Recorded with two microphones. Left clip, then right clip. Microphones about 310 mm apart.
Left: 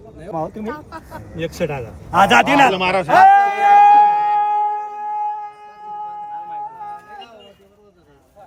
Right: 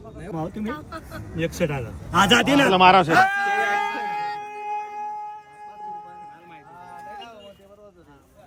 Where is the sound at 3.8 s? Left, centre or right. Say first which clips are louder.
Left 16 dB; centre.